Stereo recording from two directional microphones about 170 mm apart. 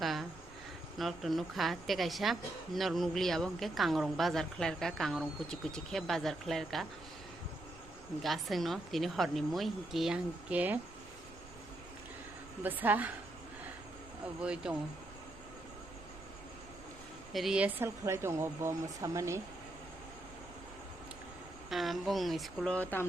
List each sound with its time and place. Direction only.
0.0 s a sound: centre (ahead or behind)
0.9 s a woman's voice: centre (ahead or behind)
8.2 s a woman's voice: centre (ahead or behind)
12.6 s speech: 10° right (ahead or behind)
14.4 s speech: 5° right (ahead or behind)
17.3 s speech: 5° right (ahead or behind)
21.7 s a woman's voice: centre (ahead or behind)